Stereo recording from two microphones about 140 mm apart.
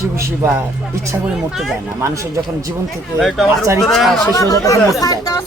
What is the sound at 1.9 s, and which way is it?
Speech, 20° right (ahead or behind).